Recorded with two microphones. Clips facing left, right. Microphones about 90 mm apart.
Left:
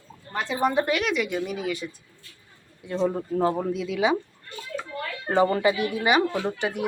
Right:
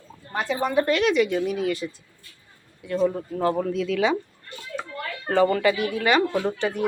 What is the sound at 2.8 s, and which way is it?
Speech, 25° left (ahead or behind).